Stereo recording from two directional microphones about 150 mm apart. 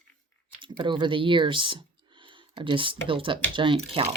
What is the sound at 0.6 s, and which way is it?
Speech, 35° right (ahead or behind).